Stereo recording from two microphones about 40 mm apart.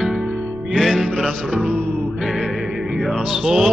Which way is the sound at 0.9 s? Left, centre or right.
Right.